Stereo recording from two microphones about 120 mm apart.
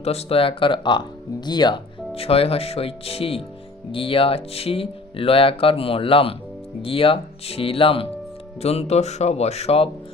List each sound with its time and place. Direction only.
0.0 s speech: 60° left (ahead or behind); by 1.8 s 35° left (ahead or behind)
2.1 s speech: 55° left (ahead or behind)
8.6 s speech: 60° left (ahead or behind)